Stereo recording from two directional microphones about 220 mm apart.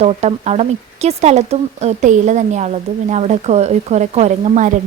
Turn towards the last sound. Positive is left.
turn(degrees=-35)  # may be behind; listen again after turning